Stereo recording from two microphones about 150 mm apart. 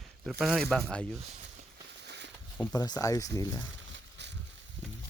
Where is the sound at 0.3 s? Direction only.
Centre (ahead or behind).